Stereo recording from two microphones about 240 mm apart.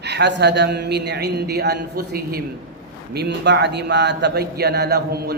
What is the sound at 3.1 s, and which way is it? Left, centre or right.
Speech, right.